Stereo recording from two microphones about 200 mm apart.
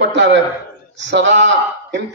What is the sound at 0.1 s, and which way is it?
A man's voice, 60° right (ahead or behind).